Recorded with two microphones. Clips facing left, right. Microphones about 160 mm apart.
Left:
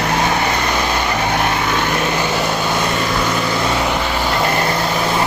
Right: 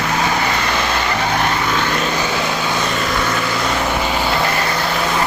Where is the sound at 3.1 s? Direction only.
15° left (ahead or behind).